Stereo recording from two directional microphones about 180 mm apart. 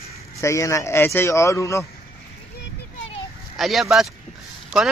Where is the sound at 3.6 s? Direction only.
Centre (ahead or behind).